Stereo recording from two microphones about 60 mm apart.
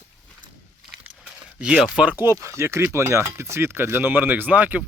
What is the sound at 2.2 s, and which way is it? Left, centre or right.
Speech, right.